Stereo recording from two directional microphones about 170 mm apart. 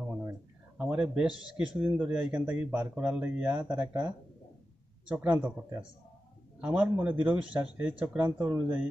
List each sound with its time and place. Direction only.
0.7 s a sound: 5° right (ahead or behind)
1.8 s speech: 5° right (ahead or behind)
6.6 s speech: 5° right (ahead or behind)